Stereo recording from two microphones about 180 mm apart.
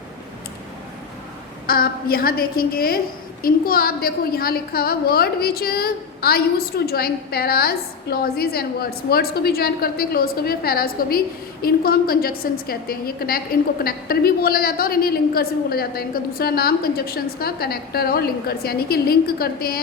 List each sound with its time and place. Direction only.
1.6 s a woman's voice: 55° left (ahead or behind)